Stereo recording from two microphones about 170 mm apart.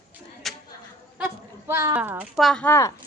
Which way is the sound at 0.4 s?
Centre (ahead or behind).